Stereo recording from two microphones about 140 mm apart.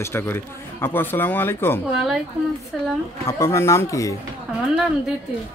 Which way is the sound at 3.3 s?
20° left (ahead or behind).